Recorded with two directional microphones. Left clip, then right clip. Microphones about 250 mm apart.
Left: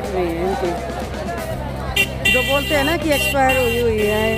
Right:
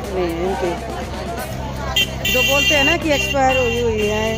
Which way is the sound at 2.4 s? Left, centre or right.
Centre.